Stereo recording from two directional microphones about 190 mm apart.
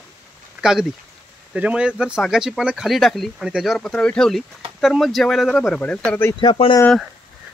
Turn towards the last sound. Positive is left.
turn(degrees=25)  # may be behind; listen again after turning